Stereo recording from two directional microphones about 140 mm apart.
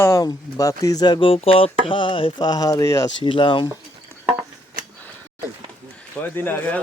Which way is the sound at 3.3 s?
35° left (ahead or behind).